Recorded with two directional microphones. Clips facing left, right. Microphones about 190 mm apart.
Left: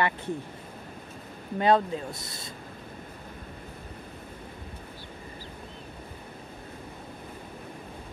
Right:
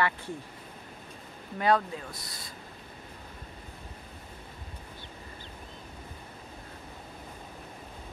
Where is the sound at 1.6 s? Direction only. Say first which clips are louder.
Left 3 dB; 25° left (ahead or behind).